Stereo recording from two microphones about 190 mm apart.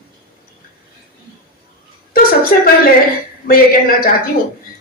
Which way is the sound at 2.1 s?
50° left (ahead or behind).